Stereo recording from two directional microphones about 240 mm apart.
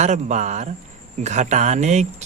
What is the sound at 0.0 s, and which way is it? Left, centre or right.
Speech, right.